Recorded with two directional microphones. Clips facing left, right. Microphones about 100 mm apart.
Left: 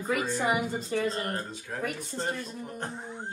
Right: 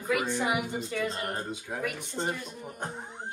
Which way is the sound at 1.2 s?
15° right (ahead or behind).